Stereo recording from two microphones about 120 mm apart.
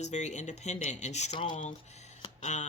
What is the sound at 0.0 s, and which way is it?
Speech, 75° left (ahead or behind).